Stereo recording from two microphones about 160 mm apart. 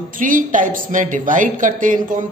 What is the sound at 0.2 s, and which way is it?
Speech, 55° right (ahead or behind).